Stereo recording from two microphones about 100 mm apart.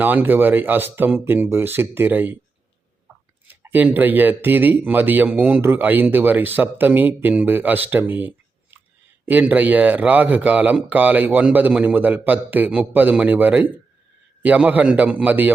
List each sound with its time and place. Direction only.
0.0 s speech: 20° right (ahead or behind)
3.4 s speech: 20° right (ahead or behind)